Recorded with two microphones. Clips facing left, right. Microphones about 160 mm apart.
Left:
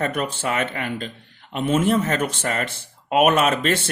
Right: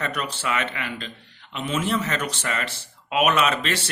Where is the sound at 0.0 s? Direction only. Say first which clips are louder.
Left 5 dB; 50° left (ahead or behind).